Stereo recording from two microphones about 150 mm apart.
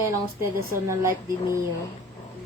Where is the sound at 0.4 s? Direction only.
20° right (ahead or behind).